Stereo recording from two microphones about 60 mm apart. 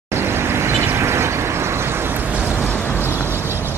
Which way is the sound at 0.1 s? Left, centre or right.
Right.